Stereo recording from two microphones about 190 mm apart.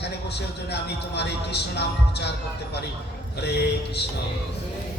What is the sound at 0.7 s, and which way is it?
A man's voice, 60° left (ahead or behind).